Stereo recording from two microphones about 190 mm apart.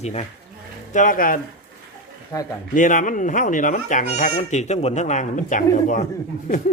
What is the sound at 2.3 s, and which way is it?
Speech, 15° left (ahead or behind).